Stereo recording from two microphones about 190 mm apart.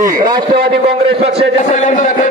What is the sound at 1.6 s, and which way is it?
Speech, 40° left (ahead or behind).